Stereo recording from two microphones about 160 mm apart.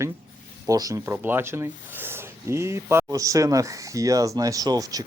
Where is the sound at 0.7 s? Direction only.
20° right (ahead or behind).